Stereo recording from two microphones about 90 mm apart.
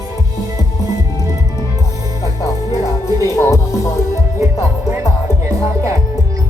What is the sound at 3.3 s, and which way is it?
Music, 30° left (ahead or behind).